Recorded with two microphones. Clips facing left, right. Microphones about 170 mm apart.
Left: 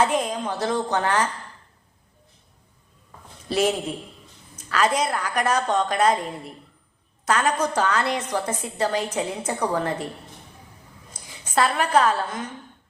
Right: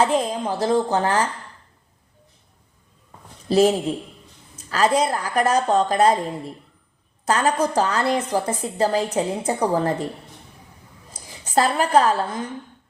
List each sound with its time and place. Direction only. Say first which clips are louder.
0.0 s a woman's voice: right 2 dB; 30° right (ahead or behind)
3.5 s a woman's voice: right 6 dB; 35° right (ahead or behind)
7.3 s a woman's voice: right 2 dB; 30° right (ahead or behind)
11.5 s a woman's voice: right 3 dB; 35° right (ahead or behind)